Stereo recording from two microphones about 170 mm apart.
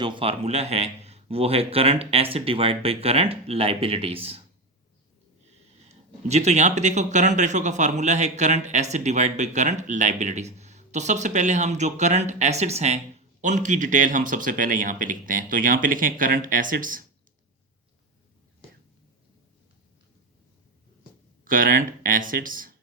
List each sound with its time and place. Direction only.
0.0 s a man's voice: 30° right (ahead or behind)
5.9 s speech: 40° right (ahead or behind)
21.4 s speech: 55° right (ahead or behind)